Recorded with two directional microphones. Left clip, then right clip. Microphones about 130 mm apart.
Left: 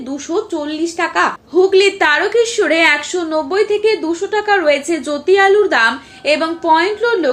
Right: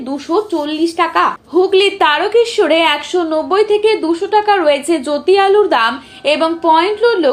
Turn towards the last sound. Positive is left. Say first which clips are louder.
# right 3 dB
turn(degrees=-30)  # may be behind; listen again after turning